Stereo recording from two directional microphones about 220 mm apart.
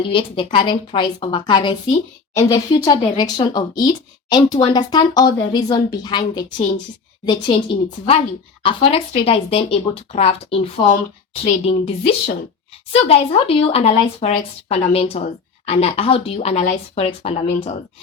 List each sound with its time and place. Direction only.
0.0 s speech: 25° left (ahead or behind)